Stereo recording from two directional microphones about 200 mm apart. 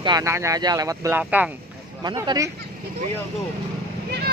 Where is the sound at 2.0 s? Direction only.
20° right (ahead or behind).